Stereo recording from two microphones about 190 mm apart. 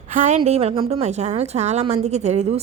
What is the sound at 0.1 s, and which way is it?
A woman's voice, 40° right (ahead or behind).